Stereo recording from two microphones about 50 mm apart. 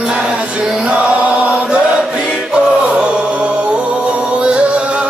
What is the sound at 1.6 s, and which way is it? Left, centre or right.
Choir, centre.